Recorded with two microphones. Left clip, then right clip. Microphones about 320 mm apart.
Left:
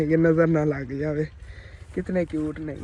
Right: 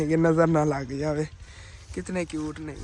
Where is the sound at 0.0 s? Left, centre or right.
Centre.